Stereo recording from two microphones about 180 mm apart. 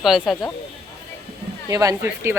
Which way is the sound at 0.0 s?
Centre (ahead or behind).